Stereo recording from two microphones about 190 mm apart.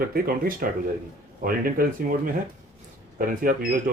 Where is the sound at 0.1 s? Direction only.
50° right (ahead or behind).